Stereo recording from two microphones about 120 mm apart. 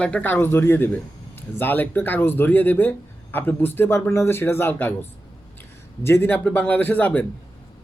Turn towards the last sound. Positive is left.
turn(degrees=15)  # may be behind; listen again after turning